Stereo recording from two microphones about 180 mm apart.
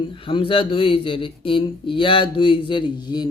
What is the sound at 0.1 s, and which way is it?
Speech, 30° left (ahead or behind).